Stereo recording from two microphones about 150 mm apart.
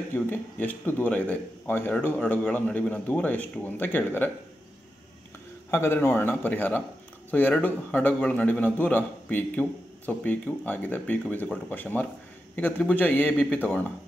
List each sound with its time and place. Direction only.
0.1 s a man's voice: 10° left (ahead or behind)
5.7 s a man's voice: 15° left (ahead or behind)